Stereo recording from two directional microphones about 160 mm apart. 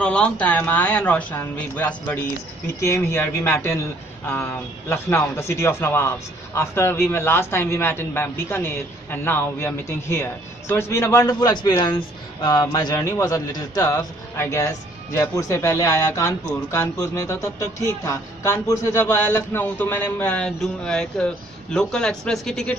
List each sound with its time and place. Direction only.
0.0 s a man's voice: 5° left (ahead or behind)